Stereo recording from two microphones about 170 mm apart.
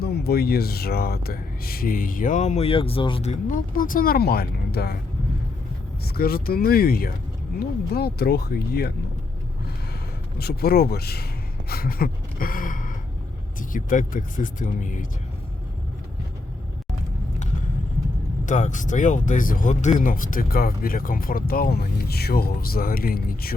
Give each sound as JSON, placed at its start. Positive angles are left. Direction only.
{"t": 0.0, "sound": "speech", "side_deg": 65}
{"t": 3.4, "sound": "speech", "side_deg": 55}
{"t": 6.1, "sound": "speech", "side_deg": 60}
{"t": 10.3, "sound": "speech", "side_deg": 65}
{"t": 11.7, "sound": "gasp", "side_deg": 60}
{"t": 13.6, "sound": "speech", "side_deg": 50}
{"t": 18.4, "sound": "speech", "side_deg": 45}